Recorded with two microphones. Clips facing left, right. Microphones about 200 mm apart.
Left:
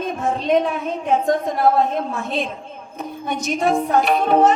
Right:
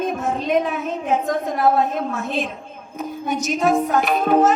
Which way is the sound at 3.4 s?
35° left (ahead or behind).